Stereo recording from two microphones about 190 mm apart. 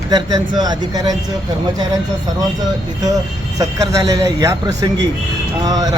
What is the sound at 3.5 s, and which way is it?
A man's voice, 20° right (ahead or behind).